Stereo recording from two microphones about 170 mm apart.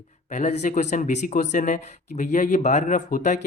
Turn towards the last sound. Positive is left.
turn(degrees=50)  # may be behind; listen again after turning